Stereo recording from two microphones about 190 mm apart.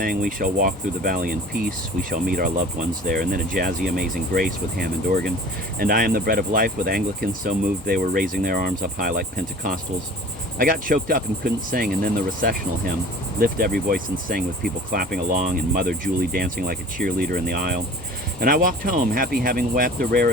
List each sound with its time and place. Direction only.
0.0 s speech: 45° right (ahead or behind)